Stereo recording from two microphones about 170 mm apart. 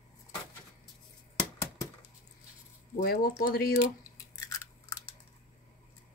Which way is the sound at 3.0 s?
65° left (ahead or behind).